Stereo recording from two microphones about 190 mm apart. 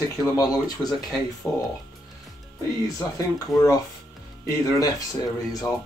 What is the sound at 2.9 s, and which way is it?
Speech, 15° left (ahead or behind).